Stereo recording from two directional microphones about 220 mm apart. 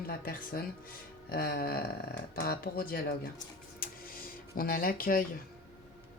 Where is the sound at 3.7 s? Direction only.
40° left (ahead or behind).